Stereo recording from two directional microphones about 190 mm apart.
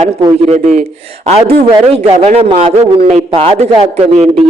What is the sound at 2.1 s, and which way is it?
A man's voice, 35° right (ahead or behind).